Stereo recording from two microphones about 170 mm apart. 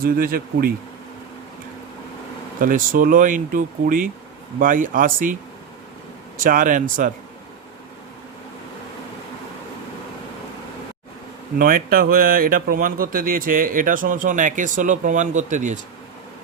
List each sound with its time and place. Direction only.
0.0 s speech: 60° right (ahead or behind)
2.6 s speech: 55° right (ahead or behind)
6.4 s speech: 55° right (ahead or behind)
11.5 s speech: 60° right (ahead or behind)